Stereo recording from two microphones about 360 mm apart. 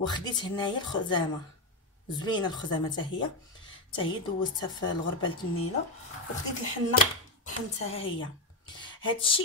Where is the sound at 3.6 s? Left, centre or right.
Centre.